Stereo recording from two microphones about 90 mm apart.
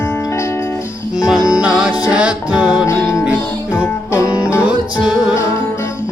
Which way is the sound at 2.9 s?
30° left (ahead or behind).